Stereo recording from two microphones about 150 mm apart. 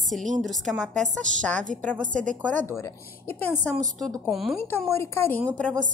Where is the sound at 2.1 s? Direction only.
55° right (ahead or behind).